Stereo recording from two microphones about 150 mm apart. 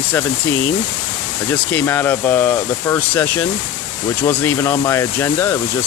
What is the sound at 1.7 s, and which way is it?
Speech, 15° left (ahead or behind).